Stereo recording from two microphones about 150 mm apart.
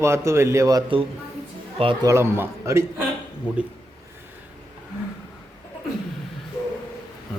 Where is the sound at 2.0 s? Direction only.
15° right (ahead or behind).